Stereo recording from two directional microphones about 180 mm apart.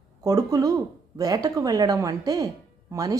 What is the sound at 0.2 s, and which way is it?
A woman's voice, 20° right (ahead or behind).